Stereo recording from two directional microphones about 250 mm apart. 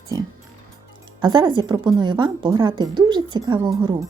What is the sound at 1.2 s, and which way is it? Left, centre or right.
Speech, centre.